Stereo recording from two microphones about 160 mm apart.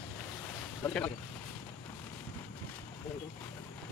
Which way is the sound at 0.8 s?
10° left (ahead or behind).